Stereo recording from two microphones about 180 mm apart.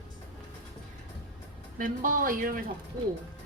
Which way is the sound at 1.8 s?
50° right (ahead or behind).